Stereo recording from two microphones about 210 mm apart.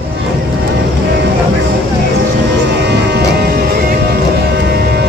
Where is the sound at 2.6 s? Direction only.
55° right (ahead or behind).